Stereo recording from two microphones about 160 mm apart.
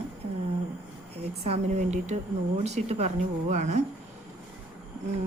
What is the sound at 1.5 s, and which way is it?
Speech, 45° right (ahead or behind).